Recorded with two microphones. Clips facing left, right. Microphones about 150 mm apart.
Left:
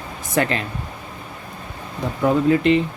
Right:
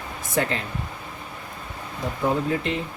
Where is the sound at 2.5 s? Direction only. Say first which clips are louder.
Left 10 dB; 80° left.